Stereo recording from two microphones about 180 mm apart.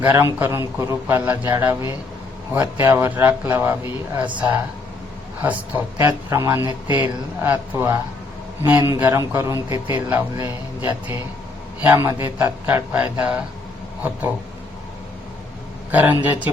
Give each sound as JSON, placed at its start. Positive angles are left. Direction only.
{"t": 0.0, "sound": "a man's voice", "side_deg": -15}
{"t": 5.4, "sound": "a man's voice", "side_deg": -10}
{"t": 15.9, "sound": "a man's voice", "side_deg": -10}